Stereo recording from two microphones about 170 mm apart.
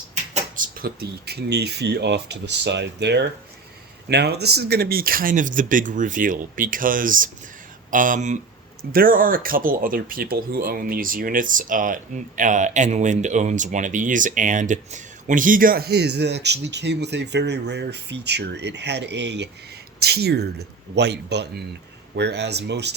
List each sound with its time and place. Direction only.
0.1 s speech: 50° right (ahead or behind); by 19.5 s 90° right
20.0 s speech: 70° right (ahead or behind)